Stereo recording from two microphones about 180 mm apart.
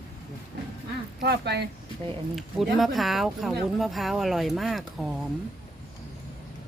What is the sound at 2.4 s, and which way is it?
Speech, centre (ahead or behind).